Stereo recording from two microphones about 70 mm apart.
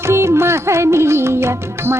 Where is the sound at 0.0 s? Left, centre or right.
Right.